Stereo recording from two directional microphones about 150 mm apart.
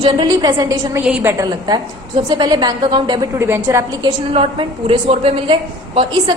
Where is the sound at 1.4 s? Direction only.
30° right (ahead or behind).